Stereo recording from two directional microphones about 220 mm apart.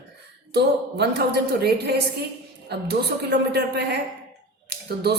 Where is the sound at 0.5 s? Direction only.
50° right (ahead or behind).